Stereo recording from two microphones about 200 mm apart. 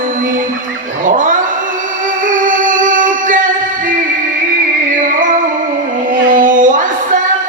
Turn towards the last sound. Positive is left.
turn(degrees=-40)  # may be behind; listen again after turning